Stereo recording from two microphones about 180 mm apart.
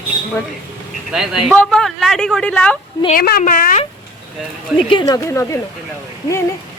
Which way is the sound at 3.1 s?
55° left (ahead or behind).